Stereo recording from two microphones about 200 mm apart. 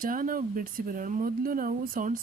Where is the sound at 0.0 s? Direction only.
45° right (ahead or behind).